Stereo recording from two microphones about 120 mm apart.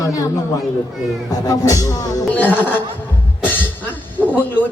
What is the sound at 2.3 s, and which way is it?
Speech, 15° left (ahead or behind).